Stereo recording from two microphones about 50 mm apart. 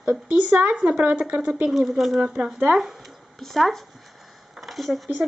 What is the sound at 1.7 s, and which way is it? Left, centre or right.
Speech, centre.